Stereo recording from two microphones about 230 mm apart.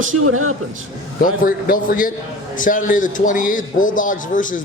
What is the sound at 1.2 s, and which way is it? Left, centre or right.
A man's voice, left.